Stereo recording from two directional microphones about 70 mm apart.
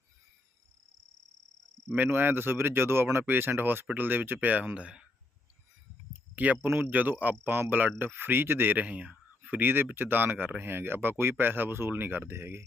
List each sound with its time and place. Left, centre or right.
2.0 s speech: right
6.3 s speech: right